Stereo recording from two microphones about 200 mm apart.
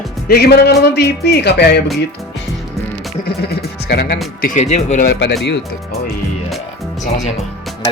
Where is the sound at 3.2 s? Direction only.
50° left (ahead or behind).